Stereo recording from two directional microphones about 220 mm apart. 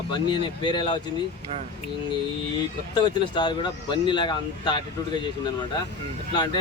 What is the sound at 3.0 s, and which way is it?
Speech, 20° left (ahead or behind).